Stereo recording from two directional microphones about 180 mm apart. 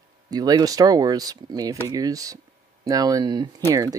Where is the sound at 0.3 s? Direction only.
20° right (ahead or behind).